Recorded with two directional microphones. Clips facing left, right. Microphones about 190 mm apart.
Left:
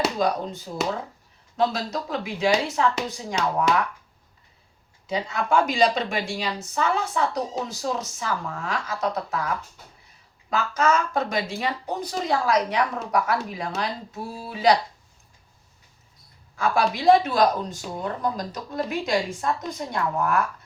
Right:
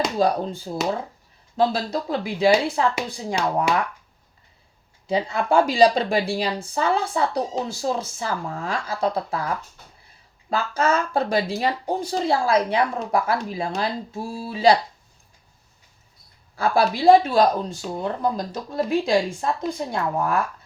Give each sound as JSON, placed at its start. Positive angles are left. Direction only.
{"t": 0.2, "sound": "a woman's voice", "side_deg": -30}
{"t": 5.0, "sound": "a woman's voice", "side_deg": -35}
{"t": 10.5, "sound": "a woman's voice", "side_deg": -30}
{"t": 16.6, "sound": "a woman's voice", "side_deg": -30}